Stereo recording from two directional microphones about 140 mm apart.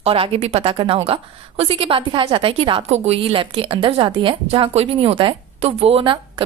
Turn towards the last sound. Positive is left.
turn(degrees=-35)  # may be behind; listen again after turning